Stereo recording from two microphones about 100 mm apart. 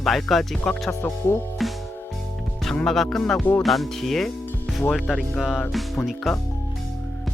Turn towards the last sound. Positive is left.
turn(degrees=0)  # may be behind; listen again after turning